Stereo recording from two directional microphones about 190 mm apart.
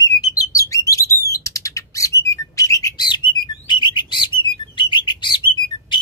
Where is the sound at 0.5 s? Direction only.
15° left (ahead or behind).